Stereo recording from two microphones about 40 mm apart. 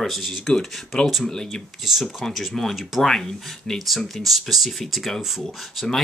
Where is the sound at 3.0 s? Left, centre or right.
Centre.